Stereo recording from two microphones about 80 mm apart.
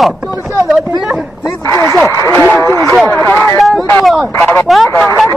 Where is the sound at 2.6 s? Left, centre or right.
Left.